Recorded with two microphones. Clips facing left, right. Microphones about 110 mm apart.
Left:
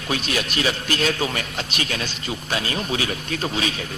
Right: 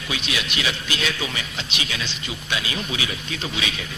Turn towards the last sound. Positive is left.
turn(degrees=40)  # may be behind; listen again after turning